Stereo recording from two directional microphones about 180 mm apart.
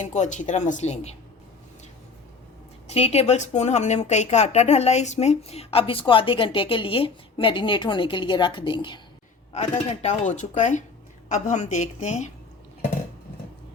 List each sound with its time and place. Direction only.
0.0 s a woman's voice: 40° left (ahead or behind)
2.8 s a woman's voice: 35° left (ahead or behind)